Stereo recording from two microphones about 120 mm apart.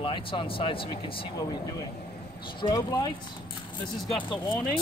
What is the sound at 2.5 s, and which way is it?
Speech, 35° left (ahead or behind).